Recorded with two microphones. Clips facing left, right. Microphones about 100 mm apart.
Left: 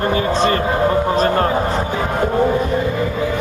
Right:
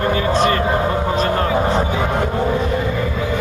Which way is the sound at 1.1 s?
40° left (ahead or behind).